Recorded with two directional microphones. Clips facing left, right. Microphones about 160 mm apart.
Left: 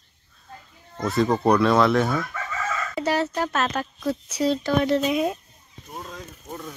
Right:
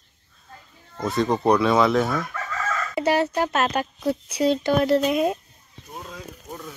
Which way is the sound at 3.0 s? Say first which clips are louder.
Right 3 dB; 60° right (ahead or behind).